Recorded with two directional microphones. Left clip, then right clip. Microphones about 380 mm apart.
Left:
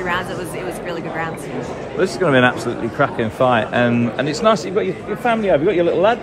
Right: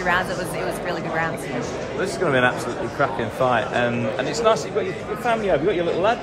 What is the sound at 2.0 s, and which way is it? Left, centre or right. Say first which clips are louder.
A man's voice: left 5 dB; left.